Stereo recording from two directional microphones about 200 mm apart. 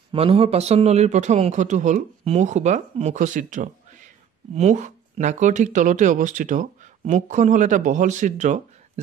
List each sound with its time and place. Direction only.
0.1 s speech: 30° right (ahead or behind)